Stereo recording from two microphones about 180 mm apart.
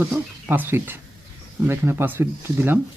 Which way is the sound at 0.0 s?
10° right (ahead or behind).